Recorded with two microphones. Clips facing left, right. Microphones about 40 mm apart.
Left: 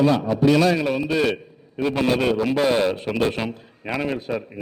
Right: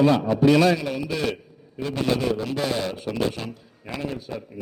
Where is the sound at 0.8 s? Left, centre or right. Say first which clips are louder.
Left 5 dB; left.